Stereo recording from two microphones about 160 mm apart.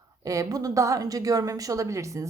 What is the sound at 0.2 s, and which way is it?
A woman's voice, 20° right (ahead or behind).